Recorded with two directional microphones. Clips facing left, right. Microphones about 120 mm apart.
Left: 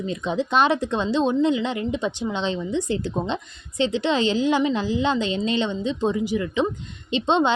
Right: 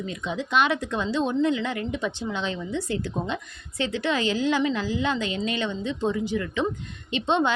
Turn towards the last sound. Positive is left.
turn(degrees=20)  # may be behind; listen again after turning